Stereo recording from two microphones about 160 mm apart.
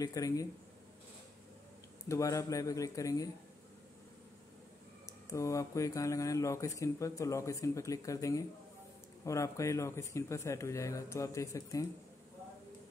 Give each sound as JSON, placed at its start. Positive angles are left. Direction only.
{"t": 0.0, "sound": "speech", "side_deg": 20}
{"t": 2.0, "sound": "speech", "side_deg": 20}
{"t": 5.0, "sound": "speech", "side_deg": 20}